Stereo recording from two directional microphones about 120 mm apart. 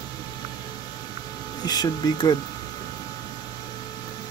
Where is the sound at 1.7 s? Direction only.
35° left (ahead or behind).